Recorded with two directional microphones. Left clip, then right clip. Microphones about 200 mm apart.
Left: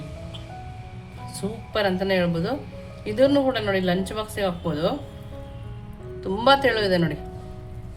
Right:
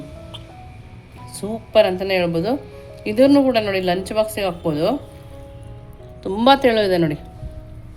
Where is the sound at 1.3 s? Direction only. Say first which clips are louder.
Right 11 dB; 25° right (ahead or behind).